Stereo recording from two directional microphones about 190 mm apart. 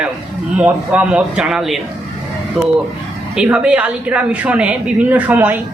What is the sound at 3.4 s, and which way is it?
A woman's voice, 5° right (ahead or behind).